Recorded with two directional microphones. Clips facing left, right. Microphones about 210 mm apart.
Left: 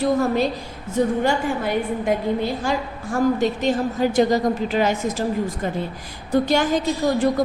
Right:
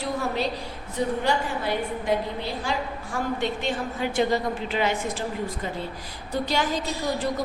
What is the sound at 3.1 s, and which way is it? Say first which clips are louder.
A woman's voice: left 8 dB; 40° left (ahead or behind).